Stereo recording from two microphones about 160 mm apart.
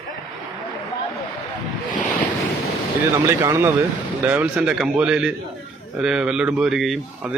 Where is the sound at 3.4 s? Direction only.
15° right (ahead or behind).